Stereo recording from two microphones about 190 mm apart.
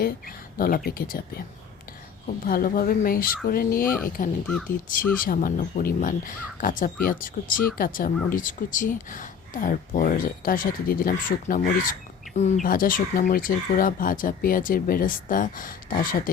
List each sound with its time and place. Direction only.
0.0 s speech: 50° left (ahead or behind)